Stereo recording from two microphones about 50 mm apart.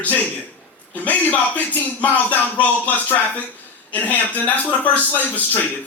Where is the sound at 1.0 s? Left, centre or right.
Left.